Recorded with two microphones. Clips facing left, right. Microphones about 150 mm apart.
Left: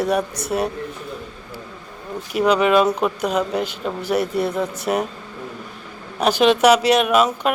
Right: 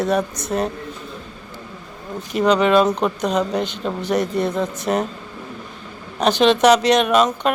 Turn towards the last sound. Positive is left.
turn(degrees=5)  # may be behind; listen again after turning